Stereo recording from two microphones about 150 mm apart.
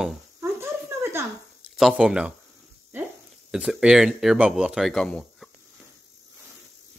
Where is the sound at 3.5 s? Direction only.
5° right (ahead or behind).